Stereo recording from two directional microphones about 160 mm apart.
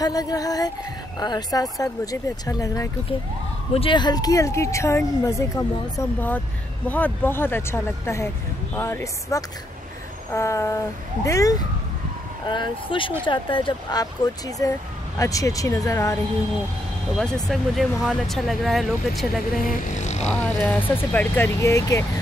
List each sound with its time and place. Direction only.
0.0 s speech: 25° left (ahead or behind)
3.7 s speech: 30° left (ahead or behind)
17.1 s speech: centre (ahead or behind)
19.6 s speech: 50° left (ahead or behind)
20.9 s speech: 10° left (ahead or behind)